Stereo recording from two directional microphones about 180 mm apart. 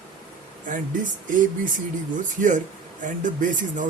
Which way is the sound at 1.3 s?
45° right (ahead or behind).